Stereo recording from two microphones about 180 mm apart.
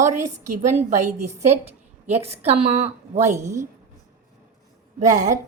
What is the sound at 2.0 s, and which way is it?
Speech, 35° right (ahead or behind).